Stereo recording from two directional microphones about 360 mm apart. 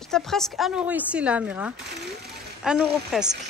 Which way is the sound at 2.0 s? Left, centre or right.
Right.